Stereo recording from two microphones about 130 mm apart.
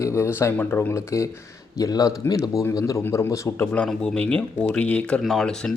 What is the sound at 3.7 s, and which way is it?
Speech, 5° left (ahead or behind).